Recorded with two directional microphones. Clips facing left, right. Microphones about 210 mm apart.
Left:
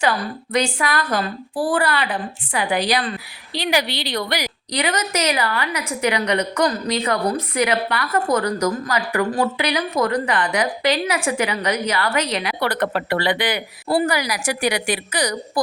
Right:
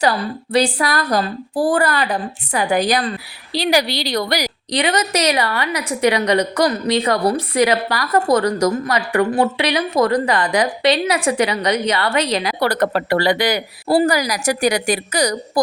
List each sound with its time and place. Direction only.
0.5 s a woman's voice: 35° right (ahead or behind)